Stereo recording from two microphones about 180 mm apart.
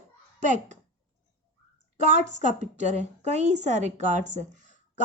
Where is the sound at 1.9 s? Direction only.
40° right (ahead or behind).